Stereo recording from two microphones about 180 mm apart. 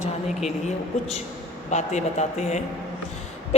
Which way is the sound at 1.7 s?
40° left (ahead or behind).